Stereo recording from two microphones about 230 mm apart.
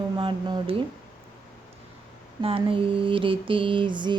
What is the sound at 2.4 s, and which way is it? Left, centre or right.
A woman's voice, right.